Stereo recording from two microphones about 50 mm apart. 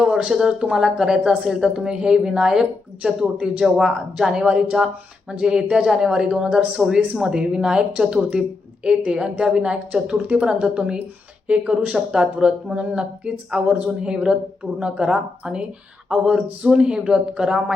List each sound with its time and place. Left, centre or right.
0.0 s a sound: centre
0.3 s a woman's voice: centre
10.2 s a woman's voice: right
12.7 s a woman's voice: right; by 17.7 s centre